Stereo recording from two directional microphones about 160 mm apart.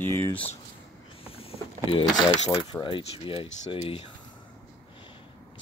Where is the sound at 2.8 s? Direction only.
30° left (ahead or behind).